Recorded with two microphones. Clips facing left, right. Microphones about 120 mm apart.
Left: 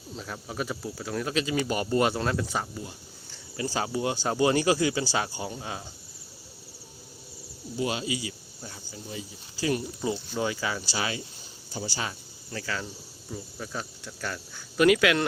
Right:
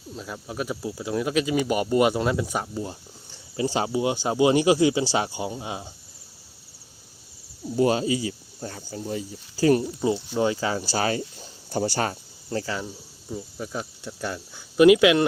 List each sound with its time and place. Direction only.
0.2 s speech: 5° right (ahead or behind)
3.6 s speech: 20° right (ahead or behind)
7.8 s speech: 40° right (ahead or behind)
8.6 s speech: 50° right (ahead or behind)
10.0 s speech: 25° right (ahead or behind)
10.8 s speech: 45° right (ahead or behind)
12.5 s speech: 35° right (ahead or behind)
13.3 s speech: 10° right (ahead or behind)